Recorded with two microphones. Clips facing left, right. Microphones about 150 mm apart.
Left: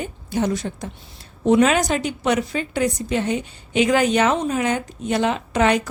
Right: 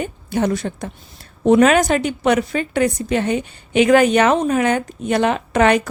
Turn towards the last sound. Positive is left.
turn(degrees=-60)  # may be behind; listen again after turning